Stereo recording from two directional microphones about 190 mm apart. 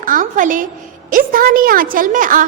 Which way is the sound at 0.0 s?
45° right (ahead or behind).